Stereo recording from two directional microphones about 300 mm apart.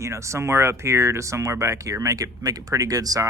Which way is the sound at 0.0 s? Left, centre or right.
Centre.